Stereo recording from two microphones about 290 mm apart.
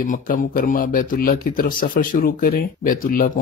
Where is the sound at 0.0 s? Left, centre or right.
Left.